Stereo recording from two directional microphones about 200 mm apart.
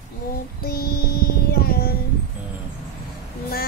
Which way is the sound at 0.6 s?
50° left (ahead or behind).